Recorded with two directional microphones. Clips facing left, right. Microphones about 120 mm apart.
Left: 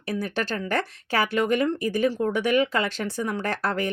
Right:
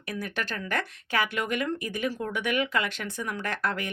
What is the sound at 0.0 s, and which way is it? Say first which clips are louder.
Speech: left 6 dB; 30° left (ahead or behind).